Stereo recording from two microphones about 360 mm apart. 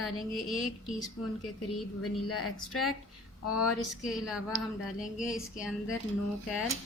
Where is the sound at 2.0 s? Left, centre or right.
Left.